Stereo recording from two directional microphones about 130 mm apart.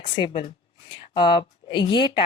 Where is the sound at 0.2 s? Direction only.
35° left (ahead or behind).